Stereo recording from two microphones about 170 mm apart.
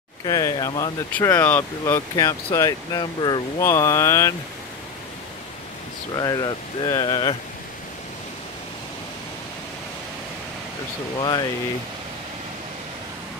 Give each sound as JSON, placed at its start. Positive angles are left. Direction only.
{"t": 0.2, "sound": "speech", "side_deg": 20}
{"t": 6.1, "sound": "speech", "side_deg": 25}
{"t": 11.1, "sound": "speech", "side_deg": 25}